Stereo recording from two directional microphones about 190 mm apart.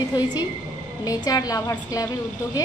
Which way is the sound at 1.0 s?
20° left (ahead or behind).